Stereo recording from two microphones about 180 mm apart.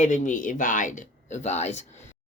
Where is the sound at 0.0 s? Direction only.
40° left (ahead or behind).